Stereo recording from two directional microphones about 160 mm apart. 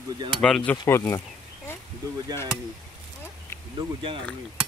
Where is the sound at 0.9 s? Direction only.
20° left (ahead or behind).